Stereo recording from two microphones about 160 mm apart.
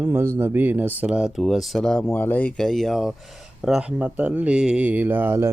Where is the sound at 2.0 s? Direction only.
10° left (ahead or behind).